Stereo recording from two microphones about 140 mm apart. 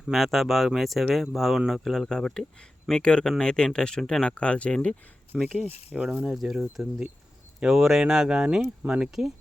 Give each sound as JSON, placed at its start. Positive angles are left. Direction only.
{"t": 0.0, "sound": "speech", "side_deg": 0}
{"t": 5.3, "sound": "speech", "side_deg": -5}